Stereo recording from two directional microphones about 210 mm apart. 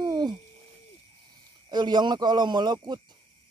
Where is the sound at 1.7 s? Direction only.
20° right (ahead or behind).